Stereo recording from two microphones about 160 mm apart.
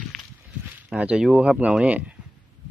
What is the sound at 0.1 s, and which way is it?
Walk, centre (ahead or behind).